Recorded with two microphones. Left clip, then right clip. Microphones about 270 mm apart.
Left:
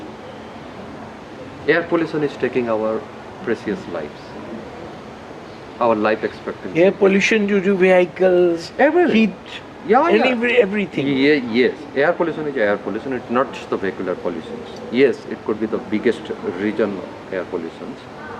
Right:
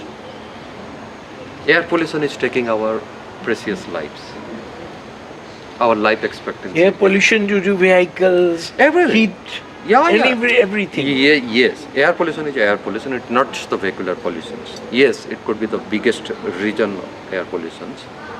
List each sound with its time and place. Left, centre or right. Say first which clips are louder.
1.6 s speech: right 3 dB; centre
5.8 s speech: right 2 dB; centre